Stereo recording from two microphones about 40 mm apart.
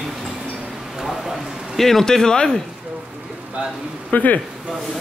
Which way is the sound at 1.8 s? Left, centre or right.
Centre.